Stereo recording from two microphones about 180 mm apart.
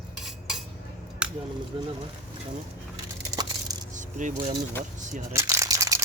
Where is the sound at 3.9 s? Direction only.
45° right (ahead or behind).